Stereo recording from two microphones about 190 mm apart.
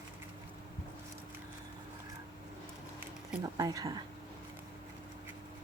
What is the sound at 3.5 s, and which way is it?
Speech, 20° right (ahead or behind).